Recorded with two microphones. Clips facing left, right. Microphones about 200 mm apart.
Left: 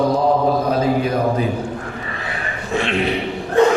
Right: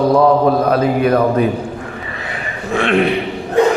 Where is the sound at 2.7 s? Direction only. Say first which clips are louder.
Right 6 dB; 55° right (ahead or behind).